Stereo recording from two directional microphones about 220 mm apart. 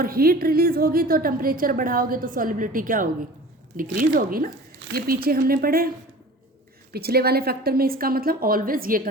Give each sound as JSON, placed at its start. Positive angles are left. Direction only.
{"t": 0.0, "sound": "a woman's voice", "side_deg": -40}
{"t": 6.9, "sound": "a woman's voice", "side_deg": -45}